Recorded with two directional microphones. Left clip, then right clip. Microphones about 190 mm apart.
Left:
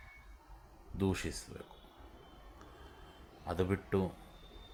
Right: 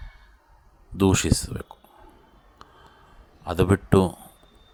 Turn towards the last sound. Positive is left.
turn(degrees=-45)  # may be behind; listen again after turning